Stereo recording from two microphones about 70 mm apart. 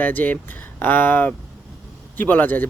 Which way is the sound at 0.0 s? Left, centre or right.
Left.